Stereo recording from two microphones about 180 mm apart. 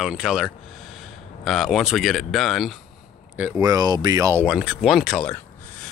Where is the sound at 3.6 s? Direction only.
20° right (ahead or behind).